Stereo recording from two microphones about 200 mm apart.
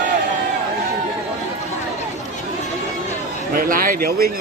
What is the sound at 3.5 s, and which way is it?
Speech, 45° right (ahead or behind).